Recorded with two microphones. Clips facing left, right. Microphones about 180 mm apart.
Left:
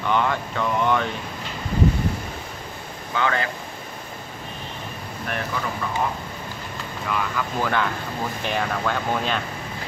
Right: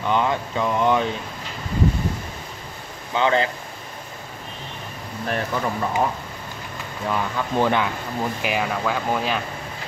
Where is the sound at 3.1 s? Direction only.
25° right (ahead or behind).